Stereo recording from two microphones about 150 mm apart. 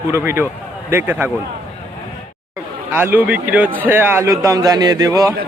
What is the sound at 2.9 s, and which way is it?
Speech, 15° right (ahead or behind).